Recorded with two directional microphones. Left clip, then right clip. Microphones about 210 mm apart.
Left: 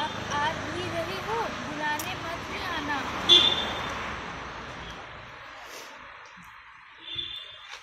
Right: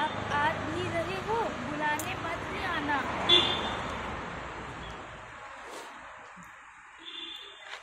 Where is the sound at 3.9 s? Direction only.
15° left (ahead or behind).